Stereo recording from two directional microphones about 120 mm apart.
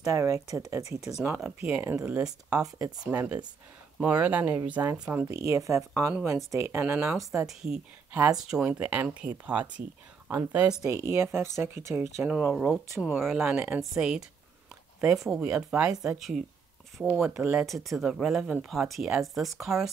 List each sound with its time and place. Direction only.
0.0 s speech: 25° right (ahead or behind)
1.4 s speech: 10° right (ahead or behind)
5.3 s speech: 25° right (ahead or behind)
7.4 s speech: 5° right (ahead or behind)
10.9 s speech: 25° right (ahead or behind)
13.2 s speech: 5° right (ahead or behind)
13.6 s speech: 20° right (ahead or behind)
13.9 s speech: 5° right (ahead or behind)
17.3 s speech: 15° right (ahead or behind)
17.6 s speech: centre (ahead or behind)